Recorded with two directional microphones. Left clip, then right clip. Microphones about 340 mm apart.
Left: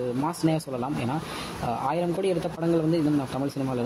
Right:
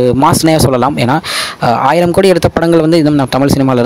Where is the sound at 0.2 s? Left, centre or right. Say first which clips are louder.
Right 18 dB; right.